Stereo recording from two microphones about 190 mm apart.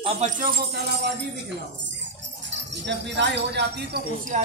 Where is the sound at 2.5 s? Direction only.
65° right (ahead or behind).